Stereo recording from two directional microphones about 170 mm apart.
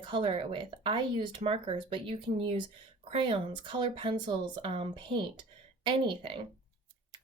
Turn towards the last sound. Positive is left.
turn(degrees=-30)  # may be behind; listen again after turning